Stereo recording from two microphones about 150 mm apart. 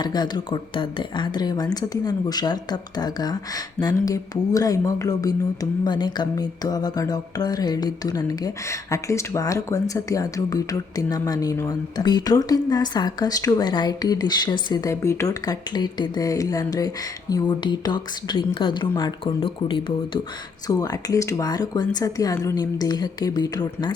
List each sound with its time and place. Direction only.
0.0 s speech: 30° left (ahead or behind)
20.7 s speech: 25° left (ahead or behind)